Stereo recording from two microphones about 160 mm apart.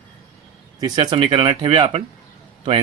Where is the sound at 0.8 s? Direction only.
25° right (ahead or behind).